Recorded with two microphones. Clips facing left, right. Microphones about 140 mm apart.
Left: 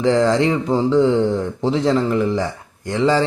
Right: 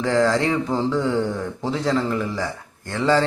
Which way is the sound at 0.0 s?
20° left (ahead or behind).